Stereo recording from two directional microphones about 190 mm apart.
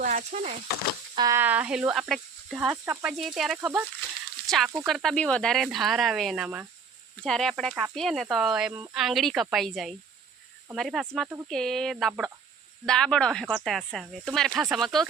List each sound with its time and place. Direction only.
0.0 s speech: 40° right (ahead or behind)
1.1 s speech: 20° right (ahead or behind)
4.4 s speech: centre (ahead or behind)